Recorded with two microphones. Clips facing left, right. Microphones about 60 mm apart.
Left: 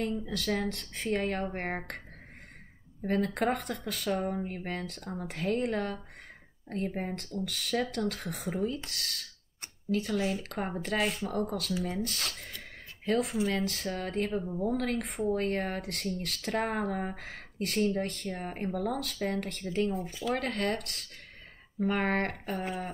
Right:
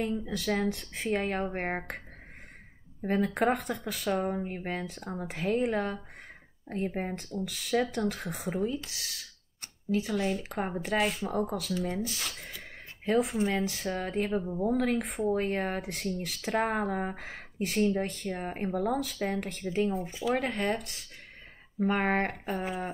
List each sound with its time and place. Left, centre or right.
0.0 s speech: centre
3.0 s speech: centre
13.1 s speech: centre